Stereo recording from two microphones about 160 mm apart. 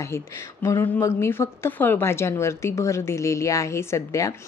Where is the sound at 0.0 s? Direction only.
20° left (ahead or behind).